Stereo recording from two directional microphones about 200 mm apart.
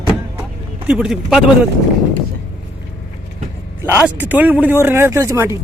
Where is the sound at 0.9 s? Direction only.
5° right (ahead or behind).